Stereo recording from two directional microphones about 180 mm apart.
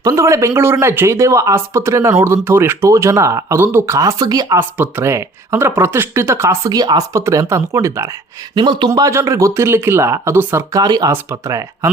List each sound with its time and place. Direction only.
0.0 s speech: 20° right (ahead or behind)